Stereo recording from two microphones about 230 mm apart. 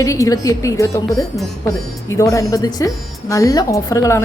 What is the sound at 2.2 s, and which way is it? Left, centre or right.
A woman's voice, centre.